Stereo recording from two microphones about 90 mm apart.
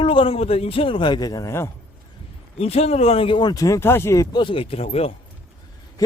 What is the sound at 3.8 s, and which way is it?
Speech, 25° left (ahead or behind).